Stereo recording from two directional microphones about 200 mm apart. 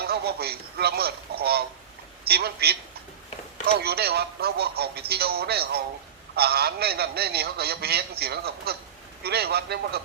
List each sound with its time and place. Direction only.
0.0 s a man's voice: 50° right (ahead or behind)